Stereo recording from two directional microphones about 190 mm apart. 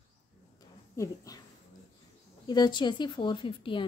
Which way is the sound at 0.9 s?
15° left (ahead or behind).